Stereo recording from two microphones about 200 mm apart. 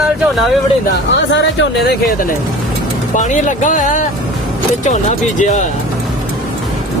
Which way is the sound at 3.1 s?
40° left (ahead or behind).